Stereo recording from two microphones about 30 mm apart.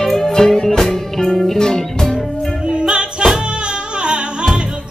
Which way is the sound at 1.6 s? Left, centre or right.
Centre.